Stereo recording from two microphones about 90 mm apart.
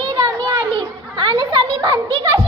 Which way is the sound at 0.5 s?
60° right (ahead or behind).